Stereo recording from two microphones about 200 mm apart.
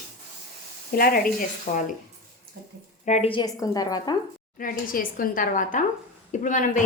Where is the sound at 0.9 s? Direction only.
50° left (ahead or behind).